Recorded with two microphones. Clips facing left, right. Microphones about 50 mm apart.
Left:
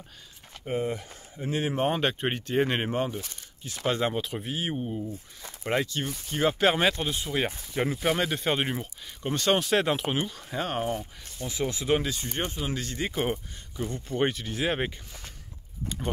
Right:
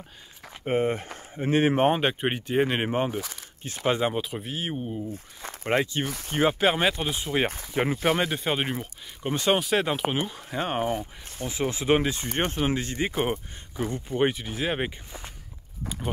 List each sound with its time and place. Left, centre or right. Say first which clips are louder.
0.7 s speech: right 5 dB; right
1.9 s speech: right 3 dB; centre
5.7 s speech: right 3 dB; right
6.0 s speech: right 2 dB; right
6.6 s speech: even; centre
7.1 s speech: right 3 dB; right
7.9 s speech: right 2 dB; centre
9.3 s speech: right 1 dB; centre
9.6 s speech: even; centre
10.4 s speech: right 2 dB; centre
11.2 s speech: right 2 dB; right
13.1 s speech: right 2 dB; centre